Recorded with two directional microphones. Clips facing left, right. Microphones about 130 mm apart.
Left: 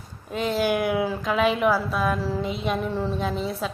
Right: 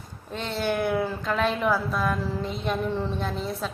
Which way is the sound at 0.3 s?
10° left (ahead or behind).